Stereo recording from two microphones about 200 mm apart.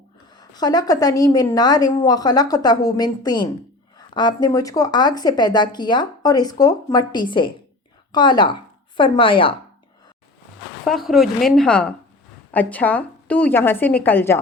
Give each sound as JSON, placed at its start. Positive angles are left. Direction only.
{"t": 0.3, "sound": "a woman's voice", "side_deg": 20}
{"t": 10.8, "sound": "a woman's voice", "side_deg": 0}